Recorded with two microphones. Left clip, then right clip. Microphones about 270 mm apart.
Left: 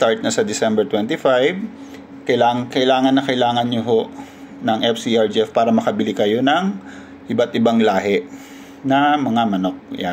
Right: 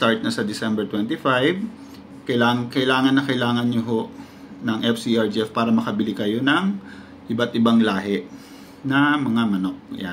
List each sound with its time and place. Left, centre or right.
0.0 s speech: centre